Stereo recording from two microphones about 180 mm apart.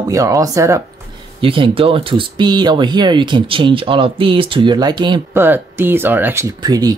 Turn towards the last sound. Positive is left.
turn(degrees=-20)  # may be behind; listen again after turning